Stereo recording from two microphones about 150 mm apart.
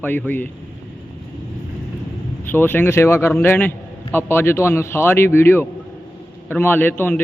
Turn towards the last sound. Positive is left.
turn(degrees=15)  # may be behind; listen again after turning